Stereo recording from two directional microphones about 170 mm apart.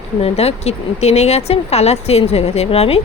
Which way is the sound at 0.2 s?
35° left (ahead or behind).